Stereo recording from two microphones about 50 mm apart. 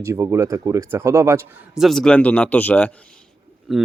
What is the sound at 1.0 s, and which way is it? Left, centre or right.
Speech, right.